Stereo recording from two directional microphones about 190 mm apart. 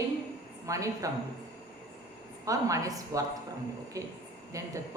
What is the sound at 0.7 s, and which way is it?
Speech, 15° right (ahead or behind).